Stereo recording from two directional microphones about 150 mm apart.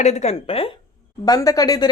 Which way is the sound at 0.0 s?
50° left (ahead or behind).